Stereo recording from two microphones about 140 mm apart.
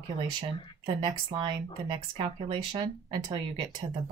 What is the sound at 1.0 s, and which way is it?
Speech, 35° right (ahead or behind).